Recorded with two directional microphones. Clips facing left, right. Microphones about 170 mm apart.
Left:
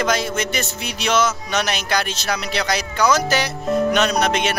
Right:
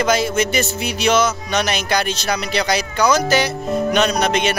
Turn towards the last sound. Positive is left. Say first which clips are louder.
# right 1 dB
turn(degrees=0)  # may be behind; listen again after turning